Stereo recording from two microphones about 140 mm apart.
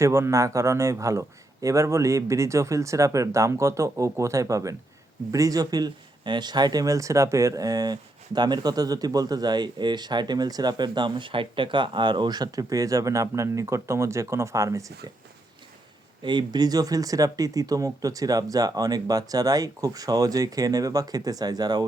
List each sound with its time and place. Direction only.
0.0 s speech: 20° right (ahead or behind)
16.2 s speech: 35° right (ahead or behind)